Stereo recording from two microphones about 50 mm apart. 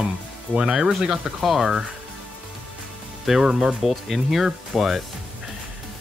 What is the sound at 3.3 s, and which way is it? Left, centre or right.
Speech, centre.